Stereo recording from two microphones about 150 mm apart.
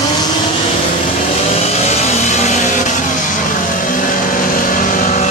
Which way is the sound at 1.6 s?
45° left (ahead or behind).